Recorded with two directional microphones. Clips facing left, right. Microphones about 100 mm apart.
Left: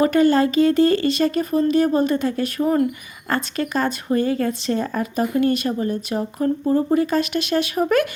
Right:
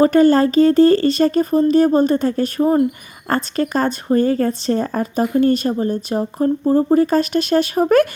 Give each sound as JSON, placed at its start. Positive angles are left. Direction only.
{"t": 0.0, "sound": "speech", "side_deg": -35}